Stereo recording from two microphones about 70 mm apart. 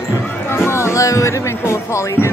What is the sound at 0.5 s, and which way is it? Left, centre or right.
Music, left.